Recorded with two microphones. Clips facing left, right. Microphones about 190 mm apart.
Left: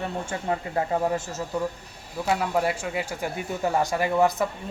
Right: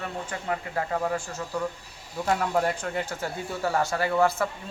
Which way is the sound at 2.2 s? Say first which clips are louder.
Left 1 dB; 5° left (ahead or behind).